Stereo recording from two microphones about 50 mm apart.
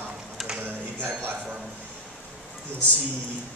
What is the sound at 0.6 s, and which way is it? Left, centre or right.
Speech, right.